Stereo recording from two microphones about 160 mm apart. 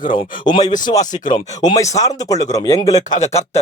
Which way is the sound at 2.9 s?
50° left (ahead or behind).